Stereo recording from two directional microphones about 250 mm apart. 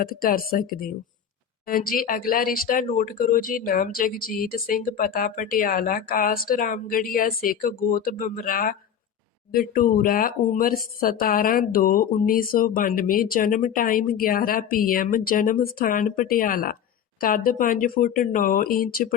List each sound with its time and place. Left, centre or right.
0.0 s speech: left